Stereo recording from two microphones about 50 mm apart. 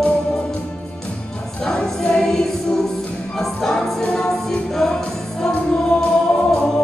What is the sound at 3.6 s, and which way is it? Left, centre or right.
Music, centre.